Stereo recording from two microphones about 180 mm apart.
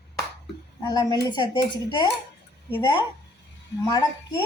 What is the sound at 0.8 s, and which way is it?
A woman's voice, 20° left (ahead or behind).